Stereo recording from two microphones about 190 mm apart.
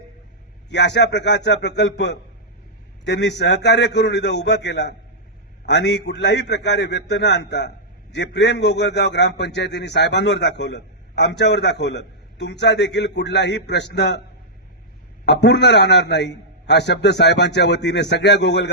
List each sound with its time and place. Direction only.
0.7 s a man's voice: 65° left (ahead or behind)
15.3 s a man's voice: 65° left (ahead or behind)